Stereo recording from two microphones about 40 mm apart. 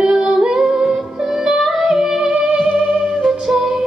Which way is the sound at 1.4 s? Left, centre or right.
Centre.